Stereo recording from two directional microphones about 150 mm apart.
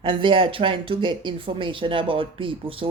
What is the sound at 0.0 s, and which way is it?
Speech, 35° right (ahead or behind).